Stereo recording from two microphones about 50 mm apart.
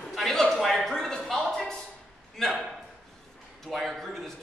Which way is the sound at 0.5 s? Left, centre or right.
Centre.